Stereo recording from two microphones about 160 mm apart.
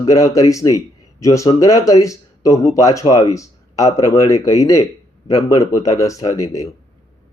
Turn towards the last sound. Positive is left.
turn(degrees=20)  # may be behind; listen again after turning